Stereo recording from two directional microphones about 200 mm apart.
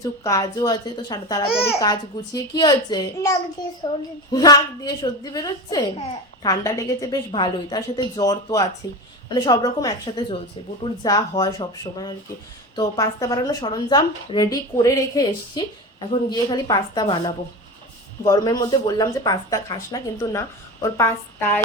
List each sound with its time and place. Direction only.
0.0 s a woman's voice: 15° left (ahead or behind)